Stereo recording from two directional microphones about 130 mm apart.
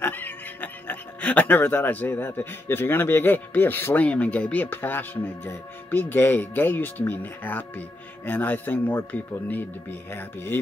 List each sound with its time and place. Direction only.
0.0 s speech: 15° left (ahead or behind)